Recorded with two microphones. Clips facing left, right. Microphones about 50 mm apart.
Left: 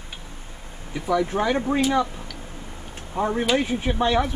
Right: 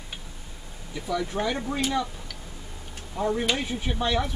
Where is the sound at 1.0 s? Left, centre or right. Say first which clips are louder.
Left 6 dB; left.